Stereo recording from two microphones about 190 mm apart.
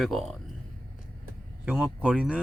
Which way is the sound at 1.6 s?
5° right (ahead or behind).